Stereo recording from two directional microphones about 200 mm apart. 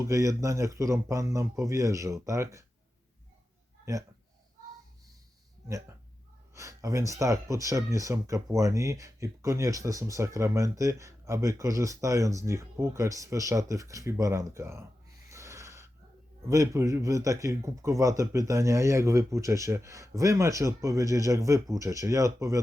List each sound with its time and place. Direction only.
0.0 s speech: 15° right (ahead or behind)
6.5 s a sound: 15° right (ahead or behind)
7.1 s speech: 15° right (ahead or behind)